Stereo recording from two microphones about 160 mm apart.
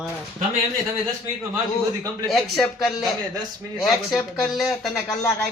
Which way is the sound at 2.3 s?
Centre (ahead or behind).